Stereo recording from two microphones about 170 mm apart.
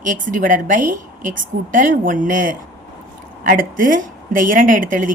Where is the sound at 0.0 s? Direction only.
50° right (ahead or behind).